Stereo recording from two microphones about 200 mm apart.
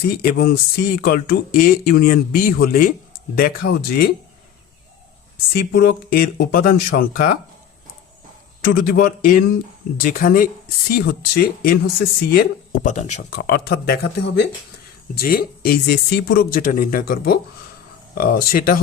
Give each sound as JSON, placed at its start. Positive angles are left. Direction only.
{"t": 0.0, "sound": "speech", "side_deg": 50}
{"t": 5.5, "sound": "speech", "side_deg": 50}
{"t": 8.6, "sound": "speech", "side_deg": 50}
{"t": 13.4, "sound": "speech", "side_deg": 50}